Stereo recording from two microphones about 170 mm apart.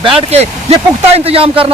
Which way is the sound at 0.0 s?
35° right (ahead or behind).